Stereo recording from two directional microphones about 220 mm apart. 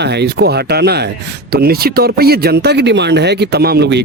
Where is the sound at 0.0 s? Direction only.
50° right (ahead or behind).